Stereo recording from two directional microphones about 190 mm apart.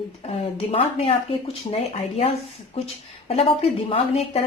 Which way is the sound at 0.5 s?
30° left (ahead or behind).